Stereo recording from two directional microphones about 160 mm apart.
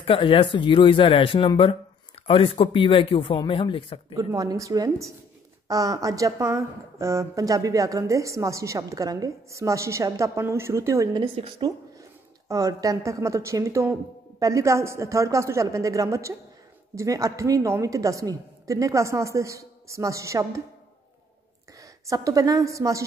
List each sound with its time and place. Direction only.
0.0 s speech: 35° left (ahead or behind)
4.1 s speech: 20° right (ahead or behind)
11.1 s a woman's voice: 30° right (ahead or behind)
12.0 s a woman's voice: 20° right (ahead or behind)
21.7 s a woman's voice: 20° right (ahead or behind)